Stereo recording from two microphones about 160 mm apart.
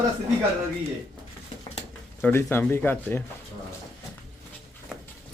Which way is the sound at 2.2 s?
15° left (ahead or behind).